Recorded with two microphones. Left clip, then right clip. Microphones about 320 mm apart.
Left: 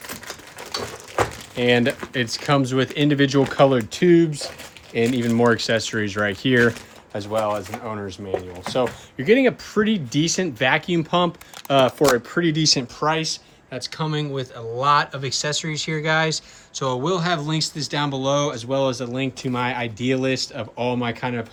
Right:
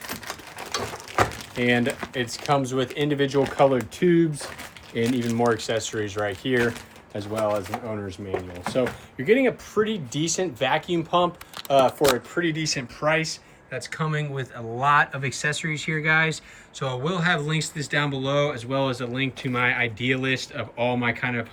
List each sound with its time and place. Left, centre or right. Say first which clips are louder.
0.1 s typewriter: even; centre
1.5 s speech: left 4 dB; left
7.4 s speech: left 1 dB; centre
9.1 s speech: left 3 dB; left
13.0 s speech: left 1 dB; centre